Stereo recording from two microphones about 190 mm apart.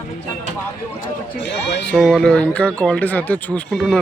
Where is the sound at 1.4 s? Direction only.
65° left (ahead or behind).